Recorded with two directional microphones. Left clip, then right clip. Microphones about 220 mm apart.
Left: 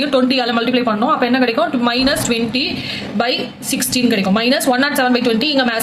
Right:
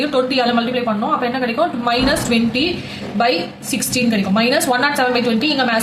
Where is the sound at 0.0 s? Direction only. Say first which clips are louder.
Left 1 dB; 35° left (ahead or behind).